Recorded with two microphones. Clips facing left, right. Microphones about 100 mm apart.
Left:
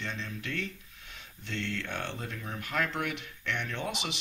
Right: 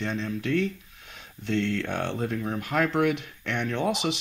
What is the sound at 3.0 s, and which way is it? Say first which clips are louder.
Speech: right 11 dB; 15° right (ahead or behind).